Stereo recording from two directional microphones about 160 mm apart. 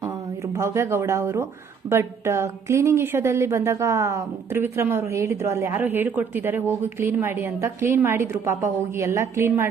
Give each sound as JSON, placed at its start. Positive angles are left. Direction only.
{"t": 0.5, "sound": "a woman's voice", "side_deg": -15}